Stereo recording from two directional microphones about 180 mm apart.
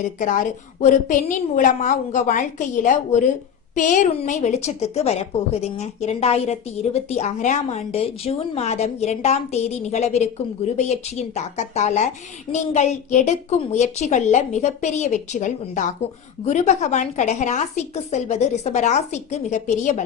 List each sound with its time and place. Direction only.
0.2 s a woman's voice: 45° left (ahead or behind)